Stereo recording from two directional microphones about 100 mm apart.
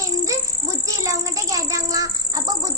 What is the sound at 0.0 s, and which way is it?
Insect, 30° right (ahead or behind).